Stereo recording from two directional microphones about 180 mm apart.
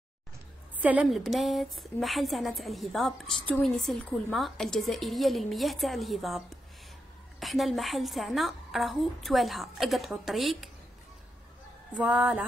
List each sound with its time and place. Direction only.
0.7 s a woman's voice: 10° right (ahead or behind)
11.9 s mantra: 5° right (ahead or behind)